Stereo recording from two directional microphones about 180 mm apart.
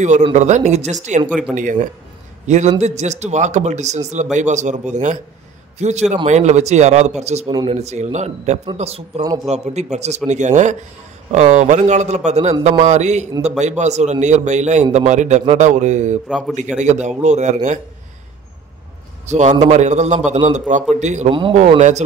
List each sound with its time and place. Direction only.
0.3 s a man's voice: 40° right (ahead or behind)
9.2 s a man's voice: 20° right (ahead or behind)
9.9 s a man's voice: 40° right (ahead or behind)
16.3 s a man's voice: 5° right (ahead or behind)
16.5 s a man's voice: 40° right (ahead or behind)
19.2 s a man's voice: 40° right (ahead or behind)
21.4 s a man's voice: 30° right (ahead or behind)